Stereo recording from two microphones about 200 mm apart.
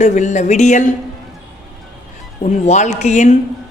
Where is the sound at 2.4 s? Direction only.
35° left (ahead or behind).